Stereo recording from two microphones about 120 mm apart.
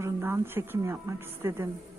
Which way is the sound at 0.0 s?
20° right (ahead or behind).